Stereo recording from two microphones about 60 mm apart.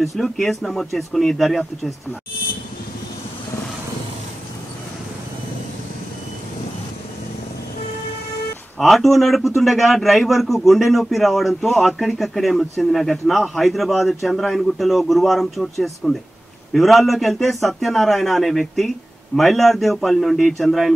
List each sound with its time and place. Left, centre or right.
0.0 s a man's voice: centre
8.7 s a man's voice: centre